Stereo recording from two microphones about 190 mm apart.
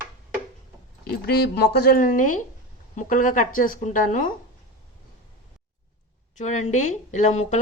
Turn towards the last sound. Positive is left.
turn(degrees=40)  # may be behind; listen again after turning